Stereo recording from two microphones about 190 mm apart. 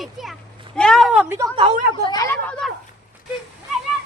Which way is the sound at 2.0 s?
15° left (ahead or behind).